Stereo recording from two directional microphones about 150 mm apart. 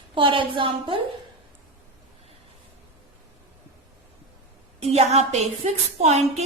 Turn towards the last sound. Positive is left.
turn(degrees=-50)  # may be behind; listen again after turning